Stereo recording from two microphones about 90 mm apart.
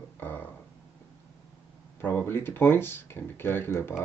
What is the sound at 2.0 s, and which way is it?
Speech, 20° left (ahead or behind).